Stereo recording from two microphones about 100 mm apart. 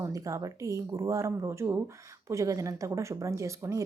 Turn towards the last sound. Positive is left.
turn(degrees=-30)  # may be behind; listen again after turning